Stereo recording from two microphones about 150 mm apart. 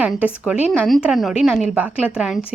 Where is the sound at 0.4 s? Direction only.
5° right (ahead or behind).